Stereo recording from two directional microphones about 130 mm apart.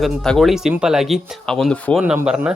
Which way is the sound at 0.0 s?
Centre (ahead or behind).